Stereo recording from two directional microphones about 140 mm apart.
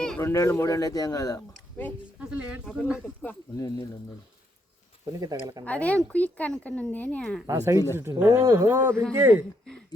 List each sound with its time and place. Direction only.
0.2 s speech: 20° left (ahead or behind)
2.3 s speech: 10° right (ahead or behind)
5.2 s speech: 25° right (ahead or behind)
5.6 s speech: 10° left (ahead or behind)
7.4 s speech: 25° right (ahead or behind)